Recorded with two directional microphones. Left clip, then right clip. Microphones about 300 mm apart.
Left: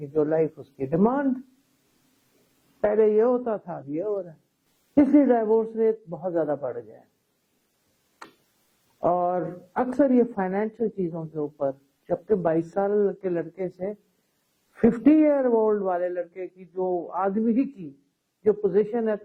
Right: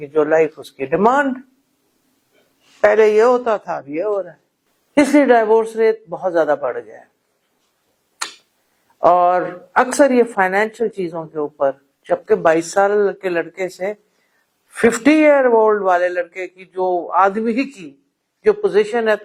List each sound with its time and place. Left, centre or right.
0.0 s a woman's voice: centre
2.8 s a woman's voice: centre
6.1 s a man's voice: centre
9.0 s a woman's voice: centre
11.1 s a woman's voice: centre
14.9 s a woman's voice: centre
16.8 s a man's voice: right
17.2 s a woman's voice: centre